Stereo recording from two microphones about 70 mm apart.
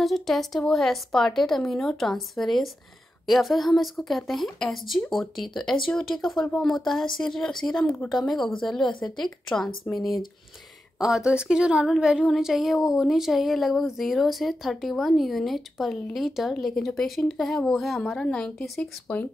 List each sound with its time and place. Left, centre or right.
0.0 s speech: centre
18.1 s speech: centre